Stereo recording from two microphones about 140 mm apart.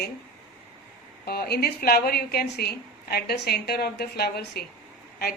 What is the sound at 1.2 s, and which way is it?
A woman's voice, 90° left.